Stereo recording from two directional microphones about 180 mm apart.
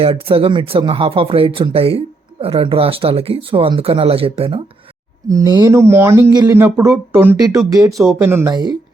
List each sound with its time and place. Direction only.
0.0 s speech: 30° right (ahead or behind)
5.3 s speech: 20° right (ahead or behind)